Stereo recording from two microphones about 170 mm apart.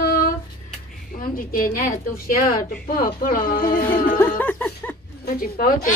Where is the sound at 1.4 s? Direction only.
55° left (ahead or behind).